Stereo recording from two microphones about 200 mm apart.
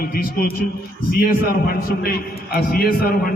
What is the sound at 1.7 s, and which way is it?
A man's voice, 50° left (ahead or behind).